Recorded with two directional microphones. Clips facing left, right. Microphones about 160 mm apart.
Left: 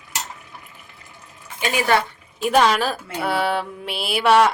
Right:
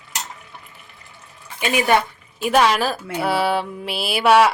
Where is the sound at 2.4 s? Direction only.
5° right (ahead or behind).